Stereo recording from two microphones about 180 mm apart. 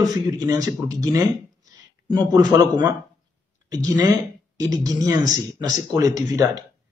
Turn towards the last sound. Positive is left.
turn(degrees=-20)  # may be behind; listen again after turning